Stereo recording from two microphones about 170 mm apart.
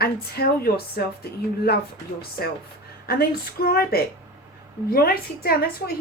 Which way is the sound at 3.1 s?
65° left (ahead or behind).